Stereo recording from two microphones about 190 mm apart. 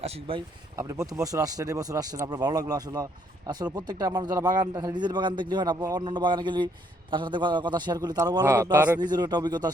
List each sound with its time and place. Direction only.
0.0 s speech: 30° right (ahead or behind)
0.8 s speech: 15° right (ahead or behind)
9.0 s speech: 20° right (ahead or behind)